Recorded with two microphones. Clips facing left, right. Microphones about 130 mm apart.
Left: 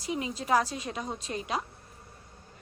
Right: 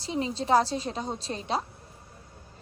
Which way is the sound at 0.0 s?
30° right (ahead or behind).